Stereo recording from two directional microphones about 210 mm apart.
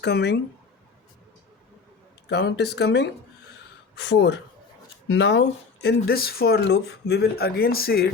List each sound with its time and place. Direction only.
0.0 s speech: 50° left (ahead or behind)
2.3 s speech: 55° left (ahead or behind)